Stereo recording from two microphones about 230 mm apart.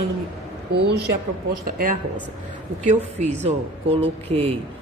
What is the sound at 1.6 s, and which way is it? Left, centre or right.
Speech, right.